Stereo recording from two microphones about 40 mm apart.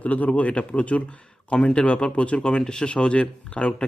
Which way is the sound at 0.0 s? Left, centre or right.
Left.